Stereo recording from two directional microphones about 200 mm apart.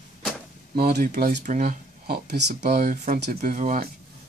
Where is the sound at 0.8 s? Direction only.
50° right (ahead or behind).